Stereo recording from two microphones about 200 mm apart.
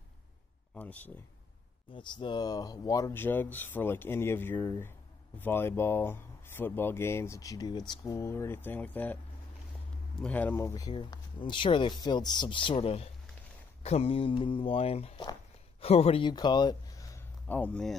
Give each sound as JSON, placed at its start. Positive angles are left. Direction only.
{"t": 0.7, "sound": "speech", "side_deg": 10}
{"t": 1.9, "sound": "speech", "side_deg": 25}